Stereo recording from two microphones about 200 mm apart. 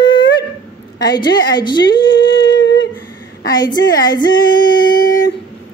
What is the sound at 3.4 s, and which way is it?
Yodeling, 20° left (ahead or behind).